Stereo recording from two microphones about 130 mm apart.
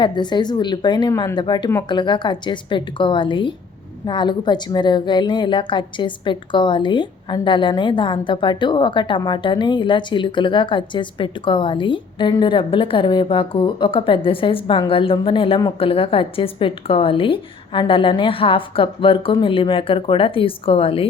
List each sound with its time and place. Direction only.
0.0 s a woman's voice: 35° left (ahead or behind)